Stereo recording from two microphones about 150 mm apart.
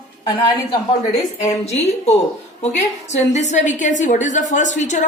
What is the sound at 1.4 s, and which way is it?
A woman's voice, 45° left (ahead or behind).